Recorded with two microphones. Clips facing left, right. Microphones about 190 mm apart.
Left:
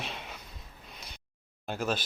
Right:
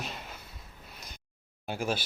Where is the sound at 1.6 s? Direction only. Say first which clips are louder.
Even; 10° right (ahead or behind).